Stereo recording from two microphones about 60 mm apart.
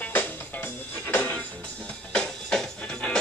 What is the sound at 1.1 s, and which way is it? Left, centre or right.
Music, left.